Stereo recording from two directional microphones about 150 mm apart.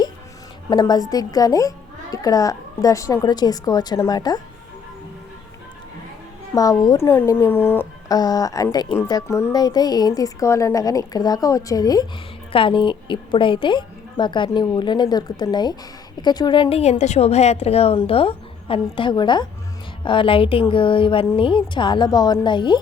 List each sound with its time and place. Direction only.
0.7 s a child's voice: 30° left (ahead or behind)
6.5 s speech: 25° left (ahead or behind)
8.1 s a child's voice: 25° left (ahead or behind)